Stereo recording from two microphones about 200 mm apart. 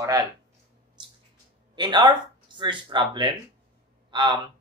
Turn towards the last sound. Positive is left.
turn(degrees=-20)  # may be behind; listen again after turning